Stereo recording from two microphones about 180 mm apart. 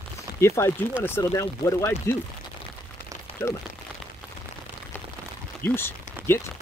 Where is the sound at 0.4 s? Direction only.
15° left (ahead or behind).